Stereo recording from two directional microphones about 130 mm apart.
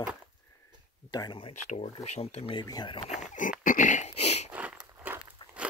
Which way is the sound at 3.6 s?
90° left.